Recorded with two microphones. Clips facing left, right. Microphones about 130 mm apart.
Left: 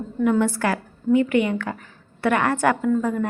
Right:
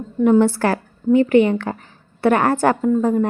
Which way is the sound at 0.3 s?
30° right (ahead or behind).